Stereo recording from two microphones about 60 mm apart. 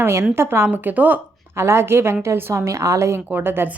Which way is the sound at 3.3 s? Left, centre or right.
Right.